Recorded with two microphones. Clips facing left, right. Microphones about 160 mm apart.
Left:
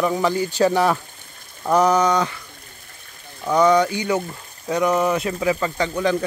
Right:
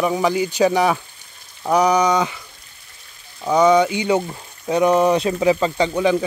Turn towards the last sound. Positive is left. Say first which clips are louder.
# right 3 dB
turn(degrees=-15)  # may be behind; listen again after turning